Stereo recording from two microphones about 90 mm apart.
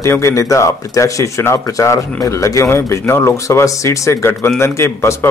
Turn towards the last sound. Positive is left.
turn(degrees=30)  # may be behind; listen again after turning